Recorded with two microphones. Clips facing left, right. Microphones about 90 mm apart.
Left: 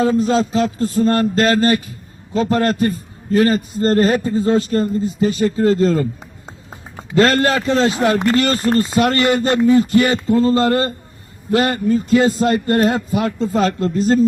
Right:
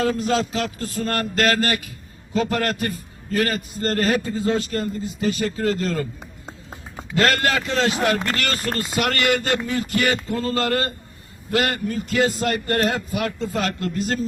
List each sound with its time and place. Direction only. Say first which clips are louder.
0.0 s a man's voice: left 6 dB; 30° left (ahead or behind)
7.1 s a man's voice: left 6 dB; 30° left (ahead or behind)